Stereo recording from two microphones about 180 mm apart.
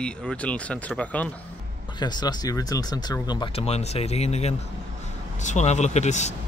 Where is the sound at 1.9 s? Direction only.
25° left (ahead or behind).